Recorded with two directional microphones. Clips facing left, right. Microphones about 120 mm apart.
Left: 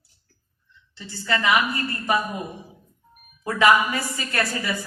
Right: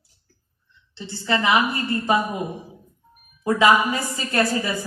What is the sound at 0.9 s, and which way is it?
A woman's voice, 25° right (ahead or behind).